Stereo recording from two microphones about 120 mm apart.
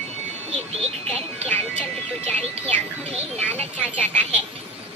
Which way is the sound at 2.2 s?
10° left (ahead or behind).